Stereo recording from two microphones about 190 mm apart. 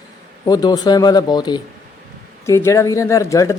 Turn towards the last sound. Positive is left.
turn(degrees=15)  # may be behind; listen again after turning